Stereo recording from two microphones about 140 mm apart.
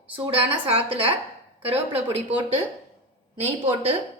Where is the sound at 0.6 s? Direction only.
45° right (ahead or behind).